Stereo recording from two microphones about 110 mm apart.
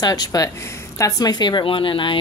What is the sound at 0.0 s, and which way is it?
Speech, 35° left (ahead or behind).